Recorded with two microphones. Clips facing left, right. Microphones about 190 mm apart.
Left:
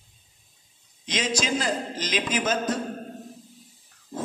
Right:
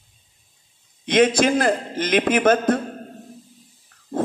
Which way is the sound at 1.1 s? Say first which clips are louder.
Right 10 dB; 55° right (ahead or behind).